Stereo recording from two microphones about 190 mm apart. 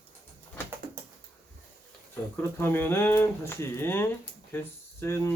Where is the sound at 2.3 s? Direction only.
10° left (ahead or behind).